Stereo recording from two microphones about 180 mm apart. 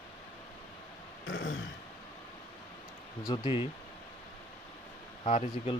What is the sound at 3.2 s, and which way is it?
Speech, 20° left (ahead or behind).